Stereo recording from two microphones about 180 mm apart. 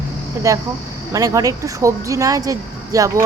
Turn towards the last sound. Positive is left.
turn(degrees=-15)  # may be behind; listen again after turning